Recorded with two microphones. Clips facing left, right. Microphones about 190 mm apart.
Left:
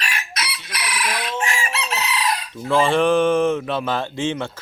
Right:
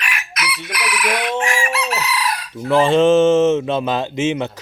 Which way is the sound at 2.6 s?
15° right (ahead or behind).